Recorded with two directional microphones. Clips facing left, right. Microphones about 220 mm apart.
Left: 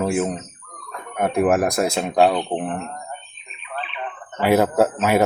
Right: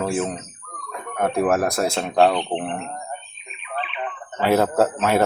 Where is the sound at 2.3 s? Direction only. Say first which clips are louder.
Left 1 dB; centre (ahead or behind).